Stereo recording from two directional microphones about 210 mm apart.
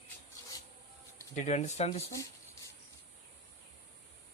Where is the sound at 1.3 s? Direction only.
35° left (ahead or behind).